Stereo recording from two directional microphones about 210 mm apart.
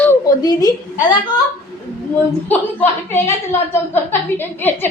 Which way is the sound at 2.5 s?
10° left (ahead or behind).